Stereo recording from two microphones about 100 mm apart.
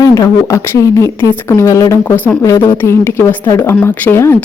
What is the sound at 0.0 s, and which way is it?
Speech, 40° left (ahead or behind).